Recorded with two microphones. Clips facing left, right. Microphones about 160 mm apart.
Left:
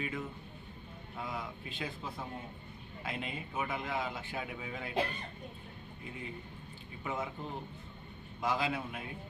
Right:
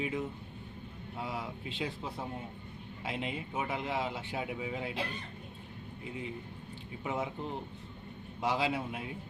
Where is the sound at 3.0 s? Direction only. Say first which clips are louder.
Right 3 dB; 20° right (ahead or behind).